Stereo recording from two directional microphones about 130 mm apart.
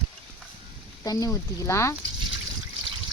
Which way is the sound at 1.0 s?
30° left (ahead or behind).